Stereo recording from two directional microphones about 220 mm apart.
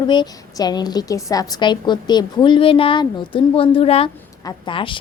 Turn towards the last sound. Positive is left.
turn(degrees=20)  # may be behind; listen again after turning